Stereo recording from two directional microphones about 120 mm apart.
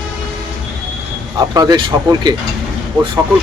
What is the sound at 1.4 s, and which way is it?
Speech, 35° right (ahead or behind).